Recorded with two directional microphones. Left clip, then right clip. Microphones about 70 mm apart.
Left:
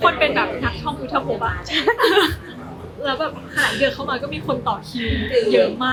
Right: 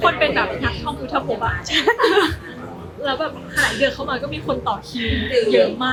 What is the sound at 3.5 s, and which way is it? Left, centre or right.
Speech, centre.